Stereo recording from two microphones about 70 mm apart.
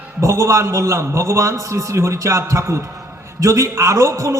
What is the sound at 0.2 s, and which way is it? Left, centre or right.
A man's voice, right.